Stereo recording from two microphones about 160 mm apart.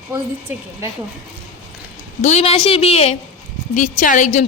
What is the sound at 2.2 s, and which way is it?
A woman's voice, 40° left (ahead or behind).